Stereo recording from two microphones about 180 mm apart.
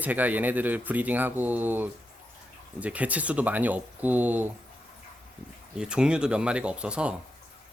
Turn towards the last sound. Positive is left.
turn(degrees=-5)  # may be behind; listen again after turning